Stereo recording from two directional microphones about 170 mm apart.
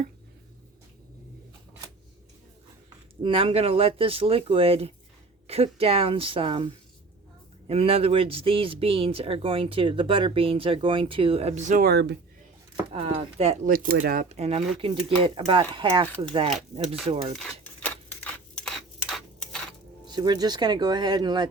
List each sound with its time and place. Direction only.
3.2 s speech: 30° right (ahead or behind)
7.7 s speech: 35° right (ahead or behind); by 12.1 s 70° right (ahead or behind)
12.9 s speech: 40° right (ahead or behind)
13.7 s speech: 60° right (ahead or behind); by 17.3 s 30° right (ahead or behind)
17.8 s a sound: 5° left (ahead or behind)
20.1 s speech: 25° right (ahead or behind)